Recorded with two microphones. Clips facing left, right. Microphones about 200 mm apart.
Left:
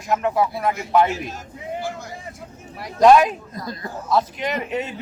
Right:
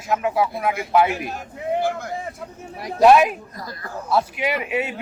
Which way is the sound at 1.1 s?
60° right (ahead or behind).